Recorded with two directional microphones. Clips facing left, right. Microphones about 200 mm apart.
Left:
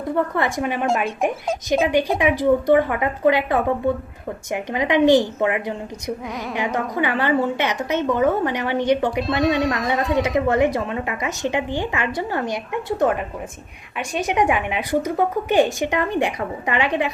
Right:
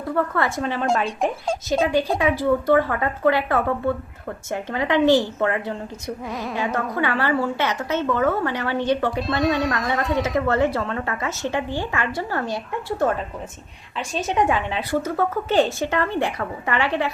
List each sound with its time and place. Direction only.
0.0 s speech: 20° left (ahead or behind)
6.2 s speech: centre (ahead or behind)
6.5 s speech: 15° left (ahead or behind)
9.2 s speech: centre (ahead or behind)
10.2 s speech: 15° left (ahead or behind)